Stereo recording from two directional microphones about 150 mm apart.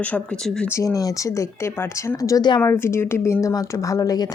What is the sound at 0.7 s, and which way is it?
Speech, 20° left (ahead or behind).